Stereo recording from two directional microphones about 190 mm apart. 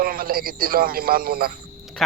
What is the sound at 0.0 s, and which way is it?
Speech, 50° right (ahead or behind).